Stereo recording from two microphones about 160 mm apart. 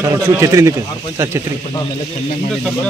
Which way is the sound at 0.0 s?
20° right (ahead or behind).